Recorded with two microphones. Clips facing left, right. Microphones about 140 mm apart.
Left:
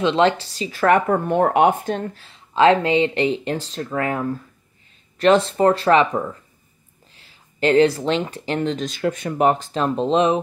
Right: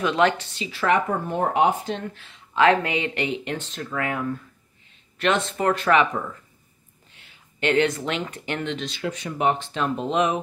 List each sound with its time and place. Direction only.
0.0 s speech: 25° left (ahead or behind)